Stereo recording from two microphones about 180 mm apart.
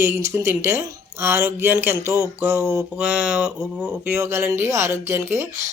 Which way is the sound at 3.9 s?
15° right (ahead or behind).